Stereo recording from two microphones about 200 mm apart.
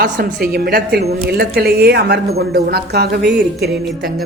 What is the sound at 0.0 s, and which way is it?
Speech, 50° right (ahead or behind).